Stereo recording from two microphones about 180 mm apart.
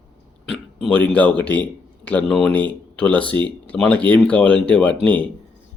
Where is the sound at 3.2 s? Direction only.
25° right (ahead or behind).